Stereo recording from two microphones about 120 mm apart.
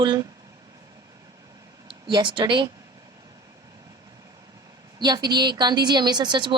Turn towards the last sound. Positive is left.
turn(degrees=-40)  # may be behind; listen again after turning